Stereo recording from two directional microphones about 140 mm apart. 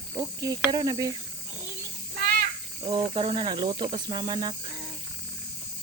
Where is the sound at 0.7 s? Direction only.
30° right (ahead or behind).